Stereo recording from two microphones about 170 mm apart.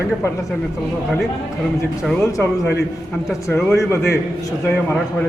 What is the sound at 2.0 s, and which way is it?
Speech, 5° left (ahead or behind).